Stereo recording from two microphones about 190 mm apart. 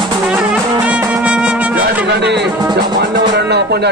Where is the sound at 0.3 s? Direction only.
5° right (ahead or behind).